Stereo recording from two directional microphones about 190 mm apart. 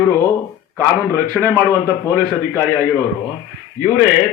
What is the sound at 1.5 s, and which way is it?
Speech, 15° left (ahead or behind).